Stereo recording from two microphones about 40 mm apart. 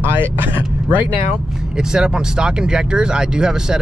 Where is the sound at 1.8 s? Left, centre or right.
Centre.